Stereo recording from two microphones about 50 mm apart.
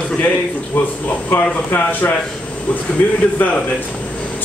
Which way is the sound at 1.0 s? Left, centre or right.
Left.